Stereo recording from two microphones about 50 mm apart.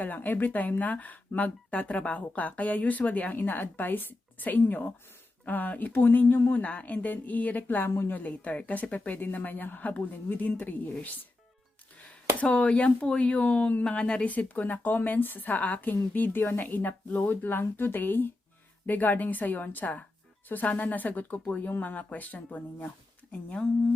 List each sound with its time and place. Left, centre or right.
0.0 s speech: left
12.4 s speech: left